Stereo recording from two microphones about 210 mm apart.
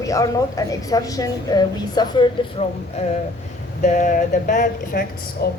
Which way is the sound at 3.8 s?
35° left (ahead or behind).